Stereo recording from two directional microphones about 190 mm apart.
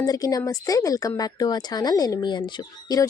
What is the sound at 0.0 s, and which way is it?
Speech, 20° left (ahead or behind).